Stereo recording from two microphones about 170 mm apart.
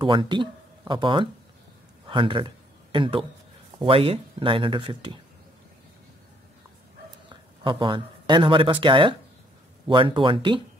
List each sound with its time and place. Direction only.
0.0 s speech: 30° right (ahead or behind)
2.0 s a sound: 30° right (ahead or behind)
3.8 s speech: 35° right (ahead or behind)
7.2 s speech: 30° right (ahead or behind)